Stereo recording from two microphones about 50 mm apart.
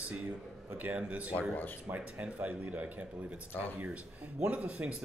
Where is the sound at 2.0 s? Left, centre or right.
Right.